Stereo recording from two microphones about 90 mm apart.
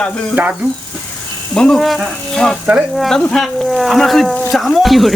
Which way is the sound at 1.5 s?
10° left (ahead or behind).